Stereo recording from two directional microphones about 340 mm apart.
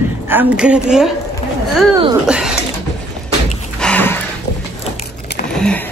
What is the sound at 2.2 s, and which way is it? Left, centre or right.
Speech, centre.